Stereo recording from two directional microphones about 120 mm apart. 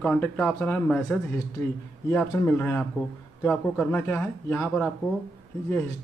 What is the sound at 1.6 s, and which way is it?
A man's voice, 20° left (ahead or behind).